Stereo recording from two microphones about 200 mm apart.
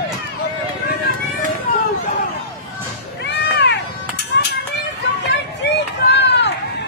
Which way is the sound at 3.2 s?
60° left (ahead or behind).